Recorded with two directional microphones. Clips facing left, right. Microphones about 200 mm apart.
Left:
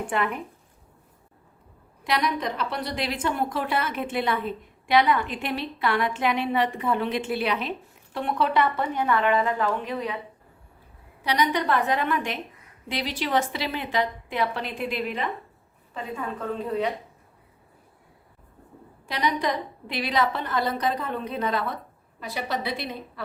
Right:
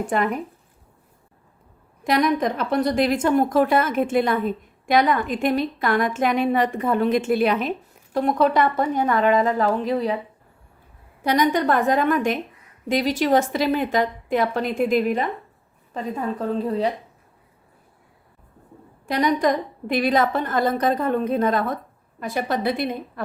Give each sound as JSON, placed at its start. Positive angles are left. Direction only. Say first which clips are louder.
{"t": 0.1, "sound": "speech", "louder": "right 4 dB", "side_deg": -40}
{"t": 2.0, "sound": "a woman's voice", "louder": "right 6 dB", "side_deg": -45}
{"t": 11.2, "sound": "a woman's voice", "louder": "right 5 dB", "side_deg": -45}
{"t": 19.0, "sound": "a woman's voice", "louder": "right 6 dB", "side_deg": -45}